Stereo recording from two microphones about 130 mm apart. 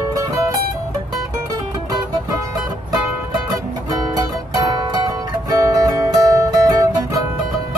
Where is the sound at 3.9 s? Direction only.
30° right (ahead or behind).